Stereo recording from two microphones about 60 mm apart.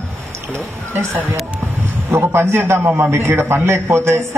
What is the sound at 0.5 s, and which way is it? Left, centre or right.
A man's voice, right.